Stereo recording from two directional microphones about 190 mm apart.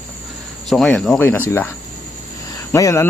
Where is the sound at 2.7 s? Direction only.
15° left (ahead or behind).